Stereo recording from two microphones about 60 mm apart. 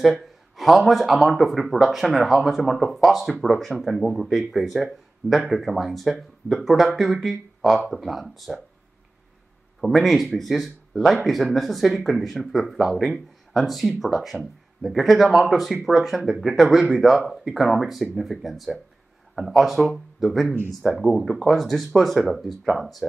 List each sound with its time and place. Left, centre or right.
0.0 s speech: centre
9.8 s speech: centre